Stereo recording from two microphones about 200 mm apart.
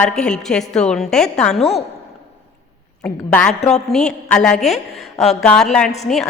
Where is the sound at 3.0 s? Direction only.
5° left (ahead or behind).